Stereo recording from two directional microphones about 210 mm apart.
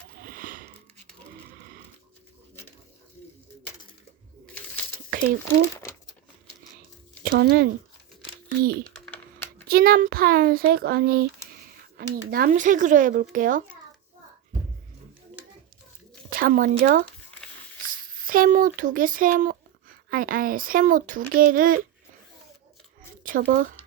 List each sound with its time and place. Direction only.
0.3 s sniff: 40° right (ahead or behind)
5.1 s speech: 45° right (ahead or behind)
7.3 s speech: 45° right (ahead or behind)
9.0 s typing: 5° left (ahead or behind)
9.6 s a child's voice: 45° right (ahead or behind)
16.3 s a child's voice: 40° right (ahead or behind)
23.2 s speech: 40° right (ahead or behind)